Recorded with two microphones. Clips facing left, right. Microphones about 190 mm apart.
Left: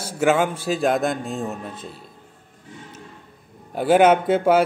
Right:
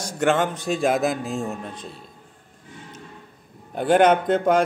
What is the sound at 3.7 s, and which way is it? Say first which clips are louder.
Speech: left 2 dB; 5° left (ahead or behind).